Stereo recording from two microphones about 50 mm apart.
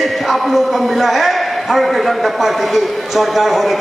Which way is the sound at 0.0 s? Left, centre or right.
Centre.